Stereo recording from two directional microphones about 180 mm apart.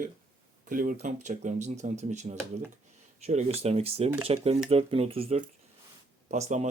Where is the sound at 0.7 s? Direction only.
50° right (ahead or behind); by 5.4 s 30° right (ahead or behind).